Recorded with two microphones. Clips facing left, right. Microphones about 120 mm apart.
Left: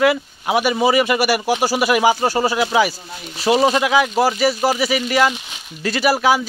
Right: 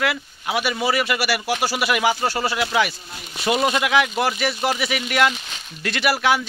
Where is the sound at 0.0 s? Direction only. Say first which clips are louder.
Left 7 dB; 15° left (ahead or behind).